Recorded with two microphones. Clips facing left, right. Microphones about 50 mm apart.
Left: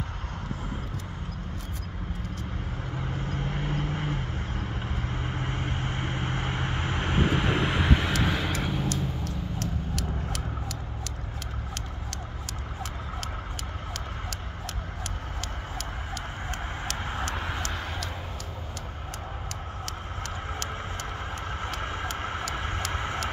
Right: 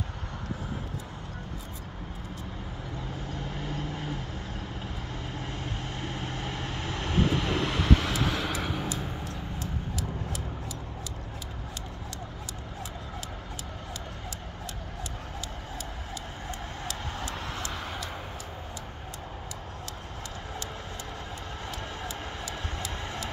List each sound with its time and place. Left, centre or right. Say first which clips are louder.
3.1 s vehicle: left 5 dB; left; by 8.5 s centre
8.5 s vehicle: left 2 dB; centre
9.6 s vehicle: left 2 dB; left
21.8 s vehicle: left 5 dB; left